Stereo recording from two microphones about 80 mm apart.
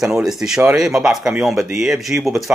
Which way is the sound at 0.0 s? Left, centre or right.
Centre.